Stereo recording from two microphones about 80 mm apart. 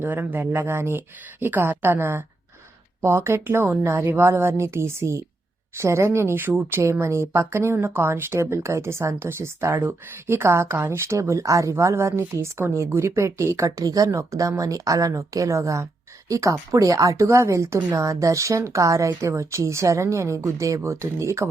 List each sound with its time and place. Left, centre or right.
0.0 s speech: right